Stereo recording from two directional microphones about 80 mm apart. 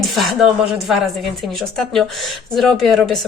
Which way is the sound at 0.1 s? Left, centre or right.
Centre.